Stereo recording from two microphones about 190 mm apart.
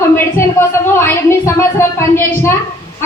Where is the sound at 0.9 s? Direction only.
15° left (ahead or behind).